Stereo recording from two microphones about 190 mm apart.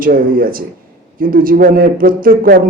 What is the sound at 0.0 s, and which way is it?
A man's voice, 50° right (ahead or behind).